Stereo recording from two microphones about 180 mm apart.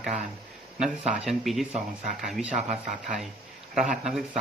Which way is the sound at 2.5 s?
40° right (ahead or behind).